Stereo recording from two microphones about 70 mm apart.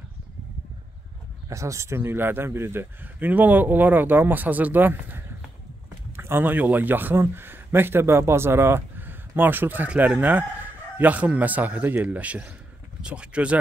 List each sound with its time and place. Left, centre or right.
1.5 s a man's voice: right; by 13.6 s centre